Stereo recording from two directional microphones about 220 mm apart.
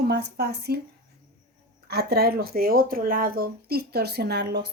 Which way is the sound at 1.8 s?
45° right (ahead or behind).